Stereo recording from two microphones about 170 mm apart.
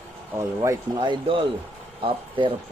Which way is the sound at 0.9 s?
30° right (ahead or behind).